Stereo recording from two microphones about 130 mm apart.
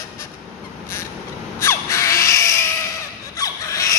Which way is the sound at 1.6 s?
20° left (ahead or behind).